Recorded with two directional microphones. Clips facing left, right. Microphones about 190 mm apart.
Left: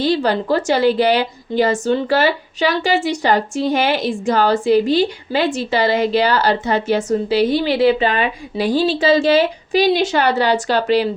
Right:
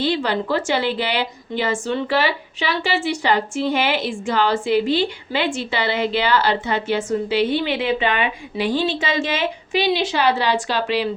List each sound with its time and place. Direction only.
0.0 s a woman's voice: 40° left (ahead or behind)